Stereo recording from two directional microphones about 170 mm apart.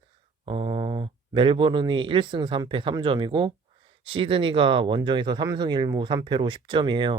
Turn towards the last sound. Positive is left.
turn(degrees=-30)  # may be behind; listen again after turning